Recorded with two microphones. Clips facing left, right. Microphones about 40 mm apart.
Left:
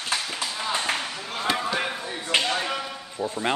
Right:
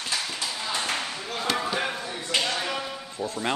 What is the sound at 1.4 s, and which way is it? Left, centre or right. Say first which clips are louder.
Chop: left 2 dB; centre.